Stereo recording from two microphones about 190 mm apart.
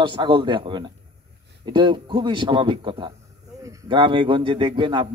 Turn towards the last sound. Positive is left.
turn(degrees=-25)  # may be behind; listen again after turning